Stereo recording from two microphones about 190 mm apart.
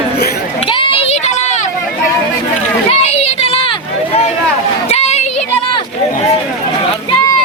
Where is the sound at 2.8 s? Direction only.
35° left (ahead or behind).